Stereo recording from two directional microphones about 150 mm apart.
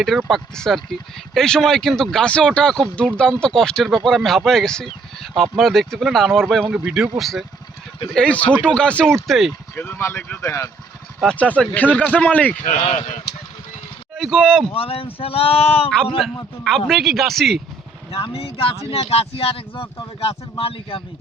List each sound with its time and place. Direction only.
0.0 s speech: centre (ahead or behind)
9.7 s speech: 15° left (ahead or behind)
11.2 s speech: 5° left (ahead or behind)
12.6 s speech: 45° left (ahead or behind)
14.2 s speech: centre (ahead or behind)
14.7 s speech: 40° left (ahead or behind)
16.6 s speech: 5° left (ahead or behind)
18.1 s speech: 40° left (ahead or behind)